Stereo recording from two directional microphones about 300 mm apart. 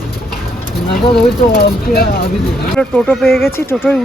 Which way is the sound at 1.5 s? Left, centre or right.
Left.